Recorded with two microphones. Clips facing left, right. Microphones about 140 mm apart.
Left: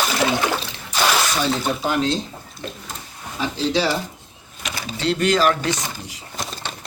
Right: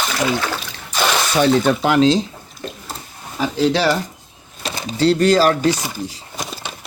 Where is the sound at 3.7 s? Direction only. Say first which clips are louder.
Even; 70° right (ahead or behind).